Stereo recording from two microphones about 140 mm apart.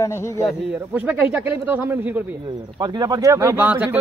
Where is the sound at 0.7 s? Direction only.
10° right (ahead or behind).